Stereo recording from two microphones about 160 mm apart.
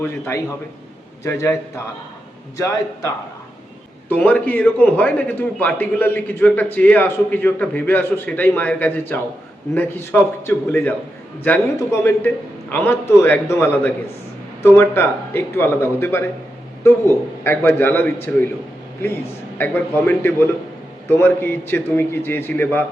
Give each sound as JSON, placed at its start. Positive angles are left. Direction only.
{"t": 0.0, "sound": "a man's voice", "side_deg": 15}
{"t": 4.1, "sound": "a man's voice", "side_deg": 10}